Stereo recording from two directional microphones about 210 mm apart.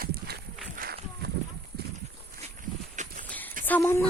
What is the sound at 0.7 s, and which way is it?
Run, 45° right (ahead or behind).